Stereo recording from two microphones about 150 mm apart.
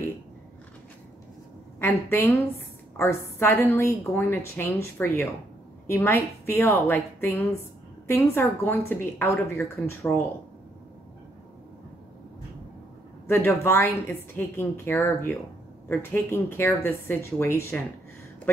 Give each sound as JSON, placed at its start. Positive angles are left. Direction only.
{"t": 1.8, "sound": "a woman's voice", "side_deg": 15}
{"t": 13.3, "sound": "a woman's voice", "side_deg": 15}